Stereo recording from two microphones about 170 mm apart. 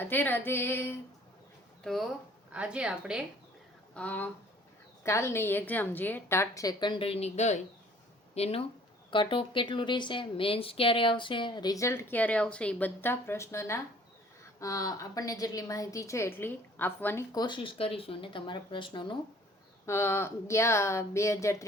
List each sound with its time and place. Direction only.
0.0 s a woman's voice: 10° left (ahead or behind)
1.8 s a woman's voice: centre (ahead or behind)
3.9 s a woman's voice: 10° left (ahead or behind)
17.3 s speech: 25° left (ahead or behind)
19.8 s a woman's voice: 15° left (ahead or behind)